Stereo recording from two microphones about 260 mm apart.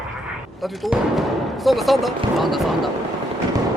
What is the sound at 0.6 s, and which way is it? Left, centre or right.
Speech, centre.